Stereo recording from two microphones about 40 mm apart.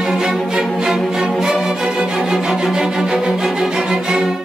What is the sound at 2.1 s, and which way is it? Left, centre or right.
Music, centre.